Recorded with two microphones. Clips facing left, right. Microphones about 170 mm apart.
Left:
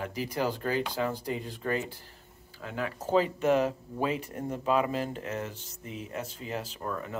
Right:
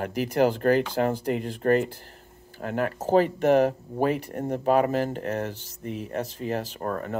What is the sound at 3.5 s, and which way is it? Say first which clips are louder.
Speech: right 6 dB; 55° right (ahead or behind).